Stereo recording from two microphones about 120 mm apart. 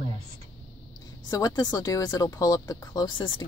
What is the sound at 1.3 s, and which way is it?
Speech, 35° left (ahead or behind).